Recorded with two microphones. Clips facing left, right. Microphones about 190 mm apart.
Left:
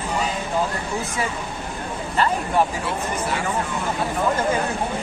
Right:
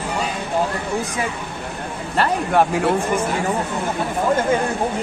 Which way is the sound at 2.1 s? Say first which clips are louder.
Right 3 dB; 65° right (ahead or behind).